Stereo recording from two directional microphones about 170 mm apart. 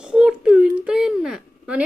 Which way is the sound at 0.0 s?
5° right (ahead or behind).